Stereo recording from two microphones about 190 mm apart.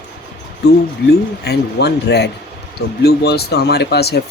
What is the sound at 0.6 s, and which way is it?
Speech, 60° left (ahead or behind).